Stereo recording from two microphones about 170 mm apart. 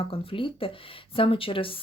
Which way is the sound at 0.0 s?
35° left (ahead or behind).